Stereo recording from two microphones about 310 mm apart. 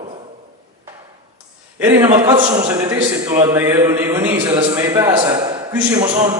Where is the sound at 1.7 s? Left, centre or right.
Centre.